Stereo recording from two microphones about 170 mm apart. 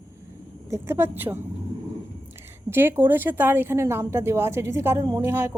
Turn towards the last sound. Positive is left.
turn(degrees=-10)  # may be behind; listen again after turning